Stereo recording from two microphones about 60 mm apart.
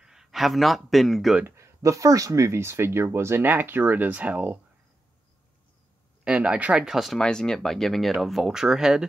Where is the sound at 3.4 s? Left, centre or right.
Right.